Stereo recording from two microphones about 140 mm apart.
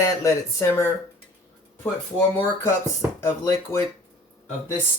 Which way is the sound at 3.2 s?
20° left (ahead or behind).